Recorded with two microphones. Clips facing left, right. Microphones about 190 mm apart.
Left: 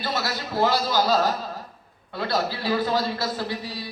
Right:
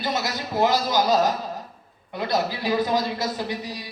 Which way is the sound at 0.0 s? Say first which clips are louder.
Right 1 dB; 20° right (ahead or behind).